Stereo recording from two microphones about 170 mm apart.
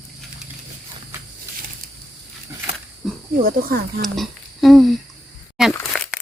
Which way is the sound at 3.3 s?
60° right (ahead or behind).